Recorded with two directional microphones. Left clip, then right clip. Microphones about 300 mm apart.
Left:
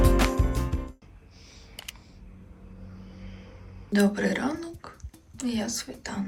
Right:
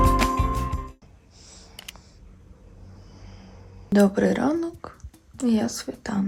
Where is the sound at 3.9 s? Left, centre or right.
Right.